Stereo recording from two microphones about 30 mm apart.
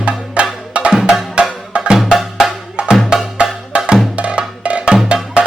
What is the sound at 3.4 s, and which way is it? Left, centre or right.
Wood block, right.